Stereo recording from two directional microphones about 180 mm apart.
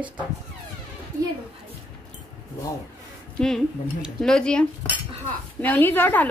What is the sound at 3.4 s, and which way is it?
A woman's voice, centre (ahead or behind).